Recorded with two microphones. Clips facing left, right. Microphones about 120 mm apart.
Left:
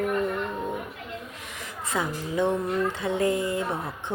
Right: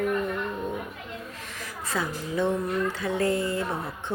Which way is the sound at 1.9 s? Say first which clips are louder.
Left 1 dB; 20° left (ahead or behind).